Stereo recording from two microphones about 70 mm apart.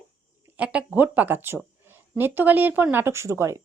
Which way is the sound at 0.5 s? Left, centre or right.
Centre.